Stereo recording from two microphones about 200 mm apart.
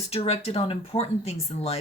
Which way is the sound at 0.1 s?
30° left (ahead or behind).